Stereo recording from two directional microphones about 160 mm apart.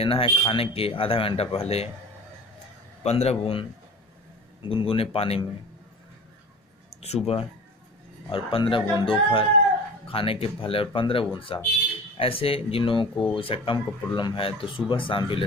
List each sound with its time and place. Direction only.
0.0 s speech: 35° left (ahead or behind)
3.0 s speech: 40° left (ahead or behind)
4.6 s speech: 35° left (ahead or behind)
7.0 s speech: 40° left (ahead or behind)